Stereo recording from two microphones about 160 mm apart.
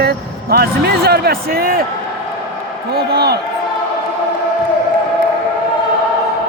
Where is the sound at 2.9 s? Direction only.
80° right.